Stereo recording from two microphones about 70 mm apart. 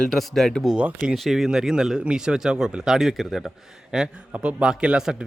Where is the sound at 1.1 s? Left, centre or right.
Centre.